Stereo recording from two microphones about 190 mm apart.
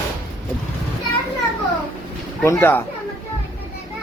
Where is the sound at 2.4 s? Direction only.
10° left (ahead or behind).